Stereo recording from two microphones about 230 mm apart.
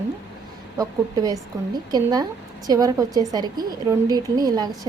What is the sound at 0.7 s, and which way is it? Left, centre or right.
A woman's voice, centre.